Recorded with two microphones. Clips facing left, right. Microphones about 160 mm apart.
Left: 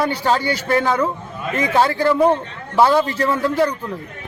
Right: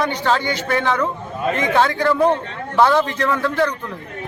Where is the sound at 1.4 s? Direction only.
35° right (ahead or behind).